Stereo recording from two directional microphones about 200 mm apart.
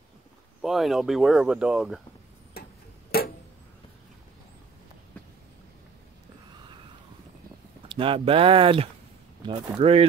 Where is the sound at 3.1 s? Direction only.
50° left (ahead or behind).